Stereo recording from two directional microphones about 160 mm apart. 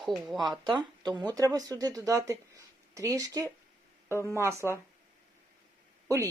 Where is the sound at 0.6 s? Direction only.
25° right (ahead or behind).